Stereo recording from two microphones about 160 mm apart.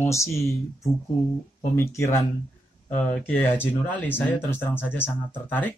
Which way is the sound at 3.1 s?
10° left (ahead or behind).